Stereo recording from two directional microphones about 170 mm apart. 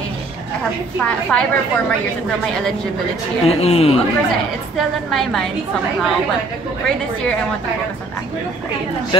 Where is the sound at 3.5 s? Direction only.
35° left (ahead or behind).